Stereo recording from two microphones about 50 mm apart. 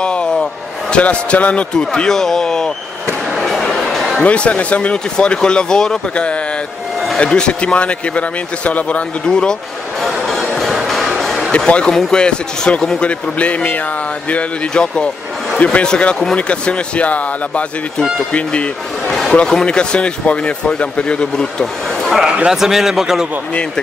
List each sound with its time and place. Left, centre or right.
0.0 s music: centre
0.9 s speech: left
1.8 s speech: centre
3.3 s a sound: centre
3.8 s music: centre
4.2 s speech: left
9.2 s speech: centre
10.0 s music: centre
11.5 s speech: left
11.9 s speech: centre
12.2 s speech: centre
14.3 s speech: centre
22.0 s a man's voice: centre